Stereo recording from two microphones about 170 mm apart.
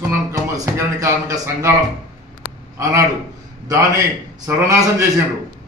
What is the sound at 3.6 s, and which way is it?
A man's voice, 20° right (ahead or behind).